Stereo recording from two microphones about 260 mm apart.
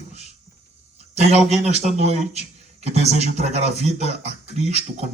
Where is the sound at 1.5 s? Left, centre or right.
Right.